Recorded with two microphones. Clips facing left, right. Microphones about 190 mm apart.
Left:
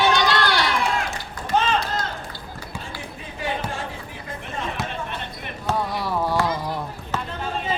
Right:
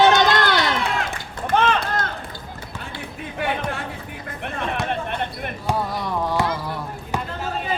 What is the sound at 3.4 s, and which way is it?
Basketball bounce, 60° right (ahead or behind).